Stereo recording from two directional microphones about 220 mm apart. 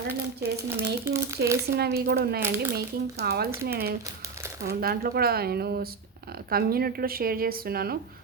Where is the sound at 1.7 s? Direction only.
45° right (ahead or behind).